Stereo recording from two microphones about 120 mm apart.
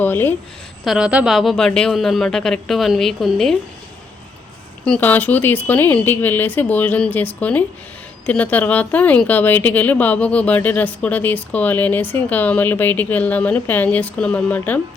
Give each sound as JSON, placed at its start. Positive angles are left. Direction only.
{"t": 0.0, "sound": "a woman's voice", "side_deg": 15}
{"t": 0.9, "sound": "a woman's voice", "side_deg": -5}
{"t": 4.9, "sound": "speech", "side_deg": 15}